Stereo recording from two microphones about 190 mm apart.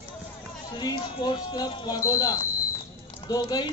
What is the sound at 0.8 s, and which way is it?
Speech, 25° left (ahead or behind).